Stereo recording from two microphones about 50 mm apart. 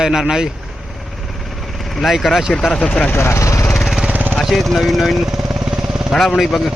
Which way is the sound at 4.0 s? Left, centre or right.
Right.